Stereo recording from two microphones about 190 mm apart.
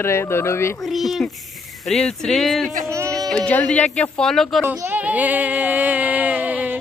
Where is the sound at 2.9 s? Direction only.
15° right (ahead or behind).